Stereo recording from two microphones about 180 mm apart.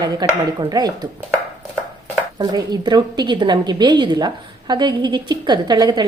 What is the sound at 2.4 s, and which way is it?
Speech, 20° right (ahead or behind).